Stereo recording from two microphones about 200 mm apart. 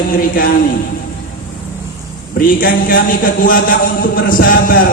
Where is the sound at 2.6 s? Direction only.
45° left (ahead or behind).